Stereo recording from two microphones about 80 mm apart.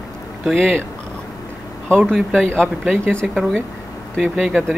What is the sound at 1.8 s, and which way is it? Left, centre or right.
Speech, centre.